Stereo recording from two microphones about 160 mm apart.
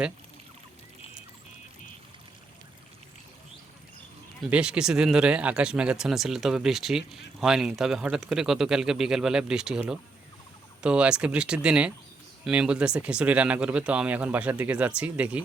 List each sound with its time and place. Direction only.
4.4 s speech: 5° right (ahead or behind)